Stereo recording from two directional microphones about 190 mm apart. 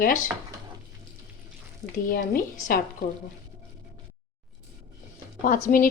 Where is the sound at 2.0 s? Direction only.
50° left (ahead or behind).